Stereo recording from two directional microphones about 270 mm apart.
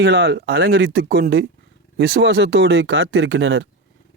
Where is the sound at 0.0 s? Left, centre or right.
Right.